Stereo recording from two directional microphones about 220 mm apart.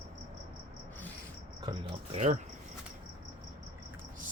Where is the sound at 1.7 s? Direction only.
20° right (ahead or behind).